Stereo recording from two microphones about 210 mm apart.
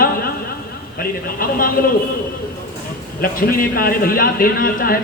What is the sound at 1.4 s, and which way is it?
Speech, 45° left (ahead or behind).